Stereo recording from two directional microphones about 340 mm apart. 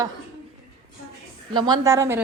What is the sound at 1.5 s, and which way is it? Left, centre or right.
Speech, centre.